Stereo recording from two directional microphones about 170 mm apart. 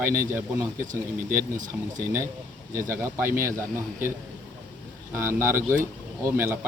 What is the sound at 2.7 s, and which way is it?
A man's voice, 15° right (ahead or behind).